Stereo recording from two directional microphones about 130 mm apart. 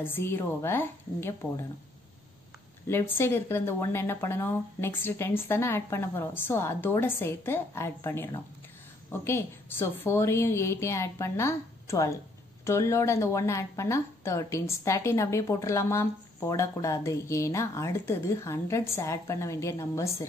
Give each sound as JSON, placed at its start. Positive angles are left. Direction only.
{"t": 0.0, "sound": "speech", "side_deg": 15}
{"t": 2.9, "sound": "a woman's voice", "side_deg": 20}